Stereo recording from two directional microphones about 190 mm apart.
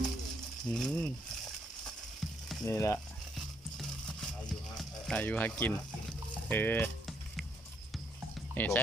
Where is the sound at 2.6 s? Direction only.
15° left (ahead or behind).